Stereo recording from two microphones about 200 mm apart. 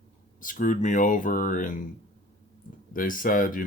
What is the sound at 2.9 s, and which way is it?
Speech, 45° left (ahead or behind).